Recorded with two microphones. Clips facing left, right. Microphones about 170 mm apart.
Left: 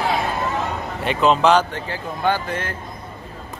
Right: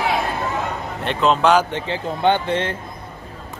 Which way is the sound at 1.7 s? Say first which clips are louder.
Right 4 dB; 25° right (ahead or behind).